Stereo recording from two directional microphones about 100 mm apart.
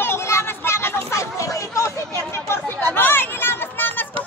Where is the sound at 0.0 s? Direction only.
25° left (ahead or behind).